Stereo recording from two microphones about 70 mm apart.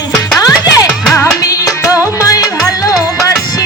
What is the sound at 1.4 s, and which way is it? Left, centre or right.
Music, left.